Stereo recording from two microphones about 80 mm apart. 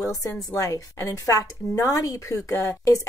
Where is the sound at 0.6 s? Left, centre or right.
Left.